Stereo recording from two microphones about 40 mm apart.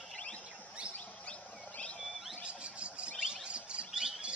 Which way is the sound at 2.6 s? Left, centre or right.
Right.